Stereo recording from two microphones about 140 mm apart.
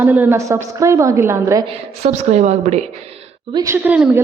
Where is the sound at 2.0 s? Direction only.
55° right (ahead or behind).